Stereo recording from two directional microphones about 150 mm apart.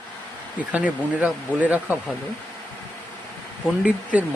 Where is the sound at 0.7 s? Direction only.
10° right (ahead or behind).